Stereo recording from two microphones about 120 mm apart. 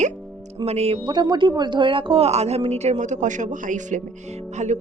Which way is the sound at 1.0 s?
35° right (ahead or behind).